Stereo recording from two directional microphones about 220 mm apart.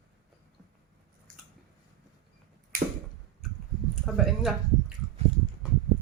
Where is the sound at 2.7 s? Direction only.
40° right (ahead or behind).